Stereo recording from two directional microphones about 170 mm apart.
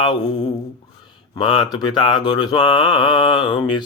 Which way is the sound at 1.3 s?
25° left (ahead or behind).